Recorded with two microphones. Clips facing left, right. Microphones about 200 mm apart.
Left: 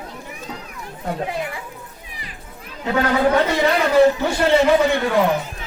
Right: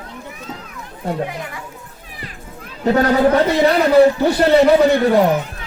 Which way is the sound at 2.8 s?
40° right (ahead or behind).